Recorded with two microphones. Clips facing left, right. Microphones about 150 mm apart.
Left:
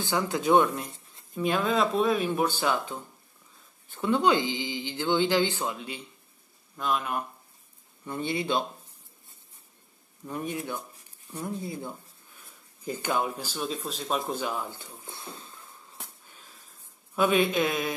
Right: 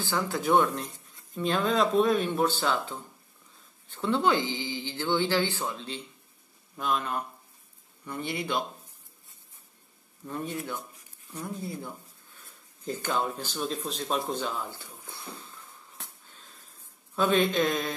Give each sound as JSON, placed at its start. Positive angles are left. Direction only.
{"t": 0.0, "sound": "speech", "side_deg": 20}
{"t": 6.8, "sound": "speech", "side_deg": 0}
{"t": 8.0, "sound": "speech", "side_deg": 25}
{"t": 10.2, "sound": "speech", "side_deg": 15}
{"t": 16.0, "sound": "wheeze", "side_deg": 15}
{"t": 17.1, "sound": "speech", "side_deg": 10}